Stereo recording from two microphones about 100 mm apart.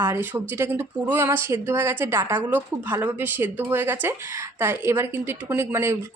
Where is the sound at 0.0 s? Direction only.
20° right (ahead or behind).